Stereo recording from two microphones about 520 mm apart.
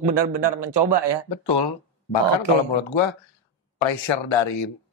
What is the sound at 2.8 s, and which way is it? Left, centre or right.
Speech, left.